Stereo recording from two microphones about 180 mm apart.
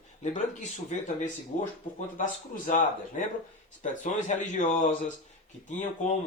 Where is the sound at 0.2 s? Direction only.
40° left (ahead or behind).